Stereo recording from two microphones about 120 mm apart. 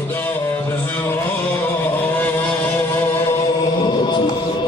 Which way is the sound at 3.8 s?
40° left (ahead or behind).